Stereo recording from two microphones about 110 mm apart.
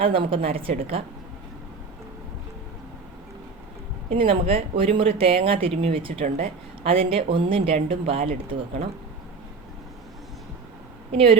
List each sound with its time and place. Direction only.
0.0 s speech: 55° right (ahead or behind)
4.1 s speech: 60° right (ahead or behind)
11.1 s speech: 60° right (ahead or behind)